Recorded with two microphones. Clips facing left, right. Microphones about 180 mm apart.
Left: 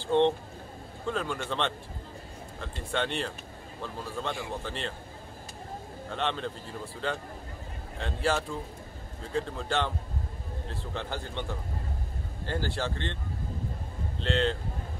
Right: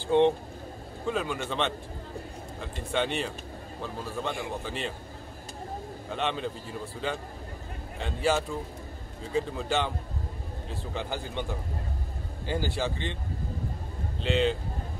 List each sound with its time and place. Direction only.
1.0 s a man's voice: 5° right (ahead or behind)
6.0 s a man's voice: 5° right (ahead or behind)
12.4 s a man's voice: 5° right (ahead or behind)
14.2 s a man's voice: 5° right (ahead or behind)